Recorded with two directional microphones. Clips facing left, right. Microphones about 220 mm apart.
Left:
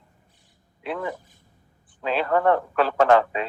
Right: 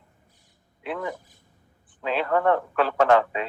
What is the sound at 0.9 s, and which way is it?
Speech, 30° left (ahead or behind).